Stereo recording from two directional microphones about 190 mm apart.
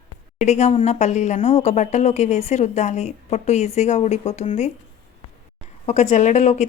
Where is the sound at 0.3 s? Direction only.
35° left (ahead or behind).